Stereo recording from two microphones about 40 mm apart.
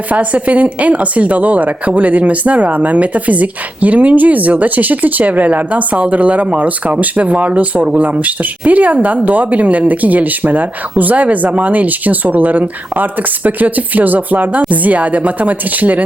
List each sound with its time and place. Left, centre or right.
0.1 s speech: right